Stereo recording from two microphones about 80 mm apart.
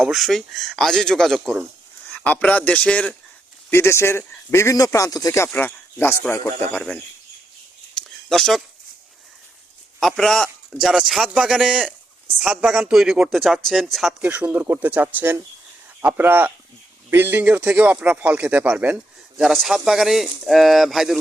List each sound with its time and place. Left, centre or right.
0.0 s a man's voice: centre
2.0 s a man's voice: centre
3.7 s speech: left
5.5 s speech: left
7.9 s a sound: centre
10.0 s speech: centre
10.7 s speech: centre
14.2 s speech: centre
19.6 s speech: centre